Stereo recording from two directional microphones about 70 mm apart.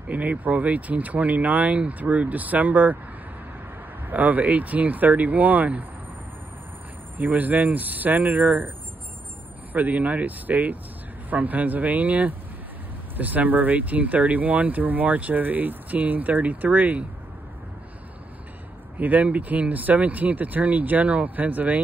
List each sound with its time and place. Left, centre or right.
0.1 s speech: right
4.1 s speech: right
7.2 s speech: right
18.9 s speech: right